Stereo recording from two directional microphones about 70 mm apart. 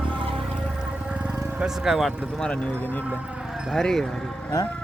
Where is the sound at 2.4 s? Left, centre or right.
Centre.